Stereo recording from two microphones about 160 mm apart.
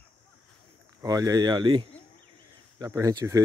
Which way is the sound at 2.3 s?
25° right (ahead or behind).